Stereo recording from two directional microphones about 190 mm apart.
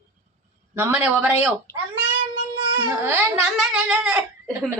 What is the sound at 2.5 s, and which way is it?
Babbling, 25° right (ahead or behind).